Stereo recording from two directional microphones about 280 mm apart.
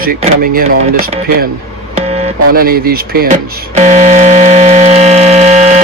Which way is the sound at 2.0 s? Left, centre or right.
Right.